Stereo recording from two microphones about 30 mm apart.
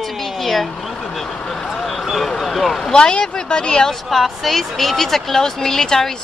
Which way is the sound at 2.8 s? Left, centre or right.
Left.